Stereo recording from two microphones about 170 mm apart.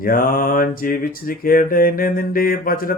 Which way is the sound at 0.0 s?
55° left (ahead or behind).